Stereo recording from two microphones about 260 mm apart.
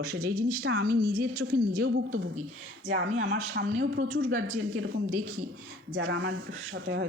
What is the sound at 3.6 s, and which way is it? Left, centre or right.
Speech, right.